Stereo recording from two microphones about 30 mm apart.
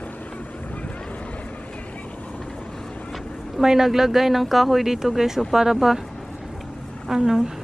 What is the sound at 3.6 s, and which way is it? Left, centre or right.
Speech, centre.